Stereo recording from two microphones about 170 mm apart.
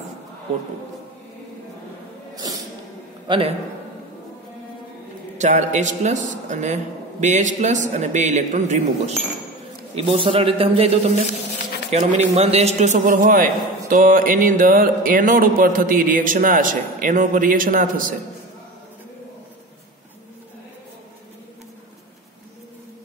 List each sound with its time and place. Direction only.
3.3 s a man's voice: 30° right (ahead or behind)
5.4 s a man's voice: 45° right (ahead or behind)
9.9 s a man's voice: 30° right (ahead or behind)
12.0 s a man's voice: 45° right (ahead or behind)